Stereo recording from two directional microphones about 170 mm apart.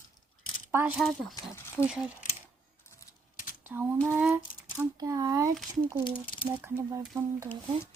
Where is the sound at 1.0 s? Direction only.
Centre (ahead or behind).